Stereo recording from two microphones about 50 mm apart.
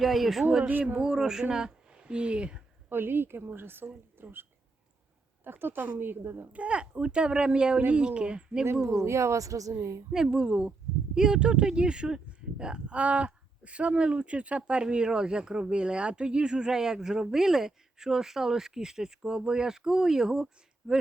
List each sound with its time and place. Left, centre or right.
0.0 s speech: centre
0.7 s speech: right
0.9 s speech: centre
2.9 s speech: right
5.5 s speech: right
6.5 s speech: right
8.9 s speech: right
9.7 s a woman's voice: right
10.1 s speech: centre